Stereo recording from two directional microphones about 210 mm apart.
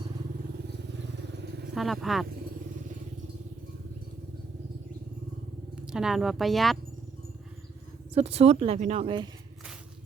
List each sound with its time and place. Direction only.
1.7 s speech: centre (ahead or behind)
5.7 s speech: 5° right (ahead or behind)
8.1 s speech: 30° right (ahead or behind)